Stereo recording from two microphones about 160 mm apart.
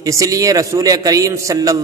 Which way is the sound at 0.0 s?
20° right (ahead or behind).